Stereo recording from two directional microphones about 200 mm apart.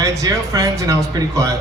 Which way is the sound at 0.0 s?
15° right (ahead or behind).